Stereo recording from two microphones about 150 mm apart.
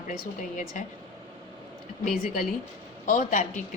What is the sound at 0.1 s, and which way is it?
Speech, 60° left (ahead or behind).